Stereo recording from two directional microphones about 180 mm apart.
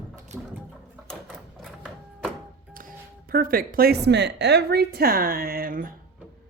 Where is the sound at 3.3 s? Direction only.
55° right (ahead or behind).